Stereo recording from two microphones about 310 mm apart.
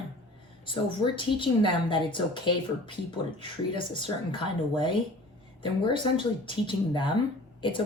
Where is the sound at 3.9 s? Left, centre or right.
Centre.